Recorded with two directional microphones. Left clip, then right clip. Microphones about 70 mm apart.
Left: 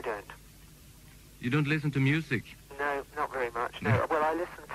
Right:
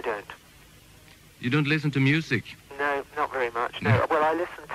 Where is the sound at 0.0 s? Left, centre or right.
Left.